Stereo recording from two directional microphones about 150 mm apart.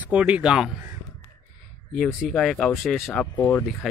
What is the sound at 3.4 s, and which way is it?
Speech, 15° left (ahead or behind).